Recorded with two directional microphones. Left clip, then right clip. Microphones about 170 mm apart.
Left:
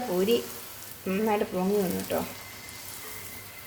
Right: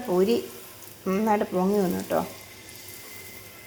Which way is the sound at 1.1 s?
15° right (ahead or behind).